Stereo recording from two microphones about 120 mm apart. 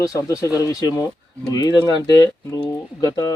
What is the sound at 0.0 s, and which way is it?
Speech, 30° left (ahead or behind).